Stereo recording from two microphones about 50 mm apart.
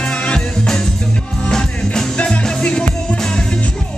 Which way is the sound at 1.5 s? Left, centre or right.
Centre.